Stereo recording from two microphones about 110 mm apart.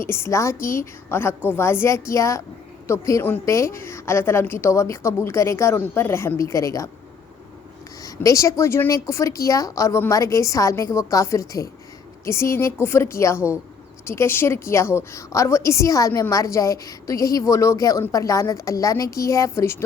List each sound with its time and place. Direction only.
0.0 s a woman's voice: 20° left (ahead or behind)
8.0 s a woman's voice: 30° left (ahead or behind)